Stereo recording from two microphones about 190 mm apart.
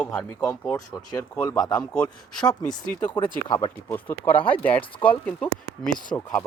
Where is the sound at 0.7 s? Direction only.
20° left (ahead or behind).